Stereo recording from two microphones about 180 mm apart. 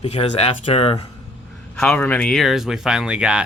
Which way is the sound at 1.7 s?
5° left (ahead or behind).